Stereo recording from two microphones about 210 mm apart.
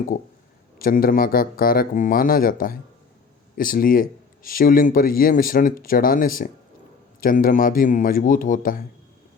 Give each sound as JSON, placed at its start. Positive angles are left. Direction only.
{"t": 0.8, "sound": "speech", "side_deg": 40}